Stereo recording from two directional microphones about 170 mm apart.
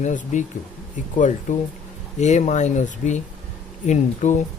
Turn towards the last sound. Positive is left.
turn(degrees=45)  # may be behind; listen again after turning